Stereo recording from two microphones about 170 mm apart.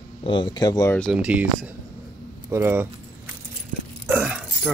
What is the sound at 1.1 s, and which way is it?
Speech, 5° right (ahead or behind).